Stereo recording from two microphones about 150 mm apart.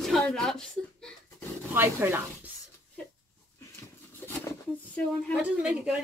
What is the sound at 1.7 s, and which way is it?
Speech, 15° right (ahead or behind).